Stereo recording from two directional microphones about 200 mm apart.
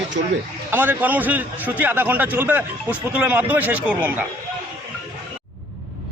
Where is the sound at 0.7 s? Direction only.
10° right (ahead or behind).